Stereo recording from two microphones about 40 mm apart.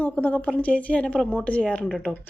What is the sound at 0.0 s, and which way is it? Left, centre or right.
Speech, left.